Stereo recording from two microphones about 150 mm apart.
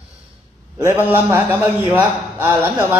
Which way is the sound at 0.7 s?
15° right (ahead or behind).